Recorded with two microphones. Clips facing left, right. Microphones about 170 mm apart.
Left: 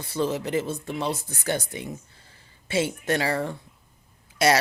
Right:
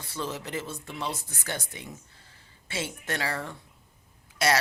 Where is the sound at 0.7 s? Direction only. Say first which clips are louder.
Left 6 dB; 40° left (ahead or behind).